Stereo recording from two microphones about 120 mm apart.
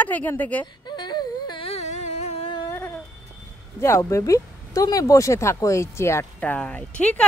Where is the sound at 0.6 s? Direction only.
35° left (ahead or behind).